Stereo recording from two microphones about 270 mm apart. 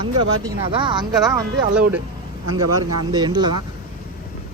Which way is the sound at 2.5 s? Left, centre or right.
Right.